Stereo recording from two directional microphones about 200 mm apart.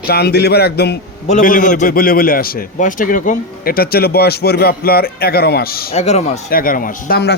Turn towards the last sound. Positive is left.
turn(degrees=50)  # may be behind; listen again after turning